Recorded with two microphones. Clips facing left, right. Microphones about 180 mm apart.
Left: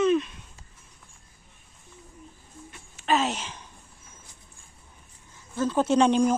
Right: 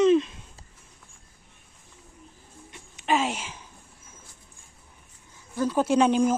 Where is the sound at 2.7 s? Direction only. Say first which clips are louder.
Even; 15° right (ahead or behind).